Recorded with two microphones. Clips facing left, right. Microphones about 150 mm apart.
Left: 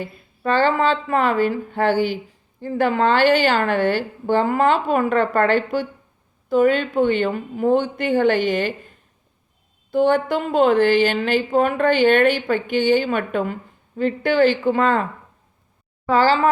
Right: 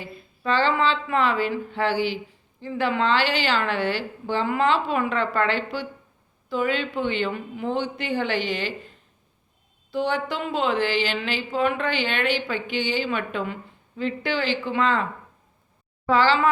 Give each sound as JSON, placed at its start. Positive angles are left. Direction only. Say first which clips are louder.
{"t": 0.0, "sound": "speech", "louder": "left 5 dB", "side_deg": 50}
{"t": 9.9, "sound": "speech", "louder": "left 8 dB", "side_deg": 50}
{"t": 16.0, "sound": "a woman's voice", "louder": "left 3 dB", "side_deg": 40}